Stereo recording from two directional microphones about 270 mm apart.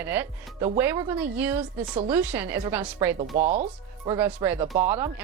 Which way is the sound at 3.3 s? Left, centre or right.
Right.